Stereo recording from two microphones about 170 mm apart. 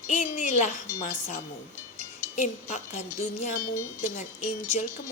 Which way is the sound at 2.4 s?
45° left (ahead or behind).